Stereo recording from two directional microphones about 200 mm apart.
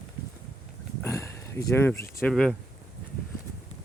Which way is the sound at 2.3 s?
Centre (ahead or behind).